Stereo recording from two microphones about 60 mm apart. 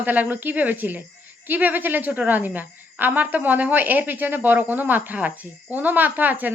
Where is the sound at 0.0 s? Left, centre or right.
Right.